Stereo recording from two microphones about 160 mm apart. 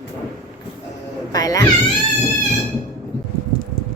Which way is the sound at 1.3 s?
25° left (ahead or behind).